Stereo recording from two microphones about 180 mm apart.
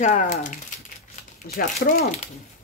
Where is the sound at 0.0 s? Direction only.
40° left (ahead or behind).